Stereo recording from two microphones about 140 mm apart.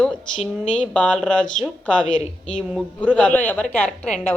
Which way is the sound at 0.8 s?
10° left (ahead or behind).